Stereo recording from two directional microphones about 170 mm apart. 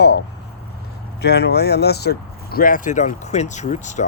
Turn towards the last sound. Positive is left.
turn(degrees=45)  # may be behind; listen again after turning